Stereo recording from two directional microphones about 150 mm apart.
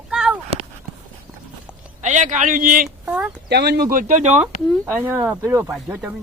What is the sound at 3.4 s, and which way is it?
Speech, 90° right.